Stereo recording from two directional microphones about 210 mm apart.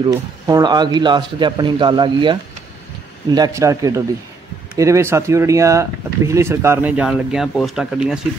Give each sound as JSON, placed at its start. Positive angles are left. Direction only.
{"t": 0.5, "sound": "speech", "side_deg": -20}